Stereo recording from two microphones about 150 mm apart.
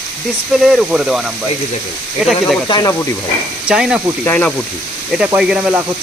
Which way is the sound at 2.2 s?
5° right (ahead or behind).